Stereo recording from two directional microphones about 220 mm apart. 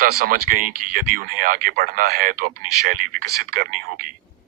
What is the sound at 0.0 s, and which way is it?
Speech, 45° right (ahead or behind).